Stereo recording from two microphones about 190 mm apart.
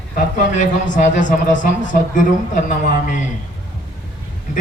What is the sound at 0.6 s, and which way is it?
Speech, 40° left (ahead or behind).